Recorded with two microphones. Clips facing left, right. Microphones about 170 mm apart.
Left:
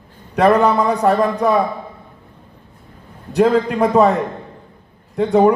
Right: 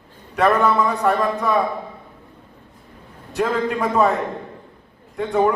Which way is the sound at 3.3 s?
40° left (ahead or behind).